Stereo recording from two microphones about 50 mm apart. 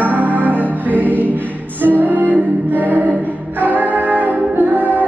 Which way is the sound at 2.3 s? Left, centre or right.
Right.